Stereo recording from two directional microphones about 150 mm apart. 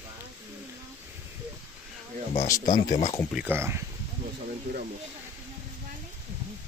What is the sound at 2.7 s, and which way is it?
Speech, 55° left (ahead or behind).